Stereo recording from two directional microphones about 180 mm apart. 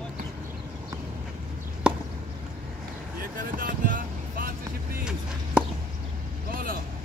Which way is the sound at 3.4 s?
50° right (ahead or behind).